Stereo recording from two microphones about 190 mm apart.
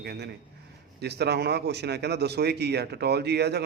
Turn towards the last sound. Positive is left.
turn(degrees=-60)  # may be behind; listen again after turning